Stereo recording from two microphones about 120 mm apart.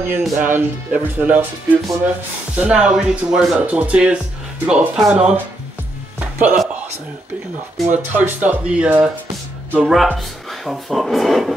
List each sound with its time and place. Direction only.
0.0 s speech: 15° right (ahead or behind)
6.1 s music: 10° right (ahead or behind)
7.9 s speech: 15° right (ahead or behind)